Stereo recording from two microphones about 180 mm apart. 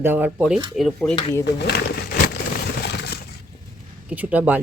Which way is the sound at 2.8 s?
65° left (ahead or behind).